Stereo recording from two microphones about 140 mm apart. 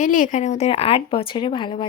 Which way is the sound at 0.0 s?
70° left (ahead or behind).